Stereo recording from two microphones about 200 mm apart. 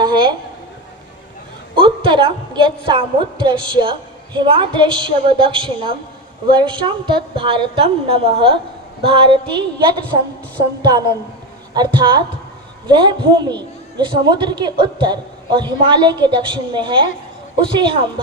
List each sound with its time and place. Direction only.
0.0 s a sound: 25° right (ahead or behind)
1.7 s a woman's voice: 25° right (ahead or behind)
11.7 s a woman's voice: 20° right (ahead or behind)